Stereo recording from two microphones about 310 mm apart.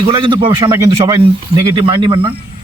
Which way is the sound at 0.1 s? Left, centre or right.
Centre.